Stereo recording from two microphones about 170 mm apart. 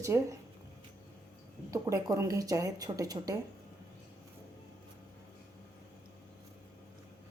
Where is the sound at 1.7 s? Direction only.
20° right (ahead or behind).